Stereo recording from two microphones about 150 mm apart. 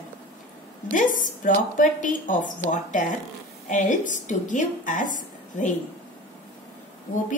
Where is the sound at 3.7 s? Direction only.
55° left (ahead or behind).